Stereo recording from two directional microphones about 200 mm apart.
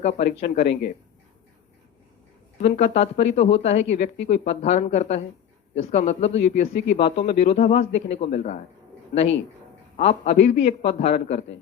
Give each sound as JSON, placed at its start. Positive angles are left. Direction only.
{"t": 0.0, "sound": "a man's voice", "side_deg": 35}
{"t": 2.6, "sound": "a man's voice", "side_deg": 35}
{"t": 10.0, "sound": "a man's voice", "side_deg": 30}